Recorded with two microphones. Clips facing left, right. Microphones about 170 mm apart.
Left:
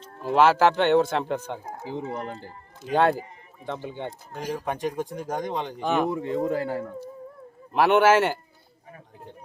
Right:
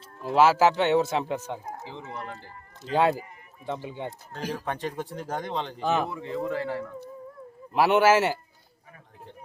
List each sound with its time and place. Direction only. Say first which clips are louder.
0.0 s speech: left 1 dB; 5° right (ahead or behind)
1.6 s speech: left 6 dB; 35° left (ahead or behind)
2.9 s speech: left 2 dB; 5° right (ahead or behind)
4.3 s speech: left 3 dB; 15° left (ahead or behind)
6.1 s speech: left 5 dB; 35° left (ahead or behind)
7.7 s speech: left 2 dB; 5° right (ahead or behind)